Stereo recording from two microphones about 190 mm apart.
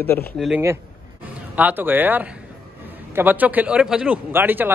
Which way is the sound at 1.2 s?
10° right (ahead or behind).